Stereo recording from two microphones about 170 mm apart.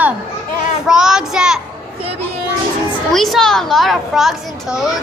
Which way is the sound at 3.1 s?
Centre (ahead or behind).